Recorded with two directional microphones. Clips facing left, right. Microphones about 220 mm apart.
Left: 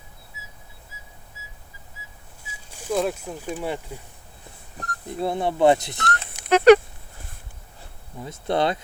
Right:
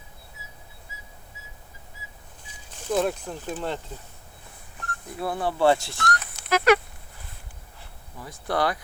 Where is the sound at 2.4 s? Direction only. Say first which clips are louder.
Left 1 dB; 10° left (ahead or behind).